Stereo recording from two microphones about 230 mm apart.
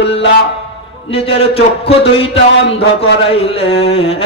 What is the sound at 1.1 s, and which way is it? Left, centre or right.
Music, left.